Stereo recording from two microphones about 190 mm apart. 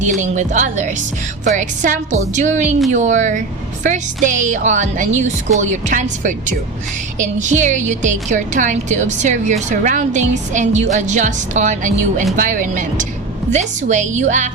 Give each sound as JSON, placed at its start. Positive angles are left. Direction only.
{"t": 0.2, "sound": "a woman's voice", "side_deg": -40}